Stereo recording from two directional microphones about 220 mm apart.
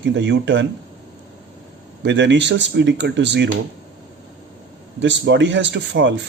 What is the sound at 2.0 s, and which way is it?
Speech, 55° right (ahead or behind).